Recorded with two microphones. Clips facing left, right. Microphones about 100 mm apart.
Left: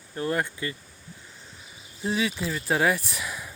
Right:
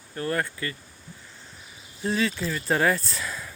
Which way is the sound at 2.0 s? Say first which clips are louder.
Right 1 dB; 15° left (ahead or behind).